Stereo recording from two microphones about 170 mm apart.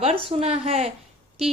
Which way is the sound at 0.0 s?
35° right (ahead or behind).